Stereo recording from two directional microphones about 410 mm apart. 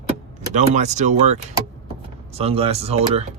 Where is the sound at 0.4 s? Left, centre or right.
Centre.